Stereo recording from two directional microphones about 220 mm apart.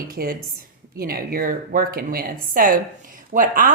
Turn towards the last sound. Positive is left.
turn(degrees=-35)  # may be behind; listen again after turning